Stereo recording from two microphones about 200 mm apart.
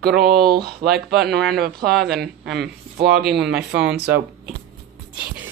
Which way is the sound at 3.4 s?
5° right (ahead or behind).